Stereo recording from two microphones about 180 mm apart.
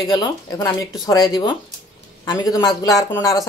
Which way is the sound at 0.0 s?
20° left (ahead or behind).